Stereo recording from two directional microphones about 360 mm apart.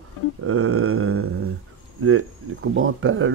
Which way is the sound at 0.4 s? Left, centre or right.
Right.